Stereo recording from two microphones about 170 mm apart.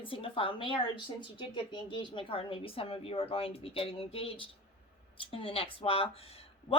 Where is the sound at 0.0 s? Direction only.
30° left (ahead or behind).